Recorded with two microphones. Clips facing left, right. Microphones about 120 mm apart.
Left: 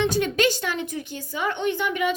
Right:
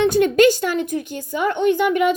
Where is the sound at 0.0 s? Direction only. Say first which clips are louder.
Right 8 dB; 50° right (ahead or behind).